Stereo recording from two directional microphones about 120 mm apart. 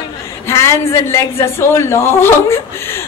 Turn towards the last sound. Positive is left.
turn(degrees=20)  # may be behind; listen again after turning